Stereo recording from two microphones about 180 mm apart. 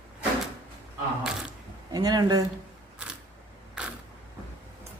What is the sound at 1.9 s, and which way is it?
Speech, 20° right (ahead or behind).